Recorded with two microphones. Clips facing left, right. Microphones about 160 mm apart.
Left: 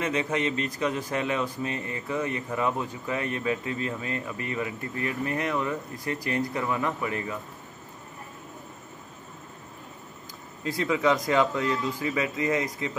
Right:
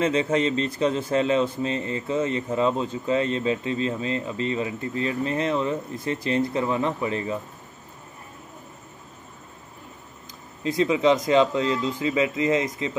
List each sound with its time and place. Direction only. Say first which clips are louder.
0.0 s speech: right 5 dB; 30° right (ahead or behind)
10.6 s speech: right 4 dB; 20° right (ahead or behind)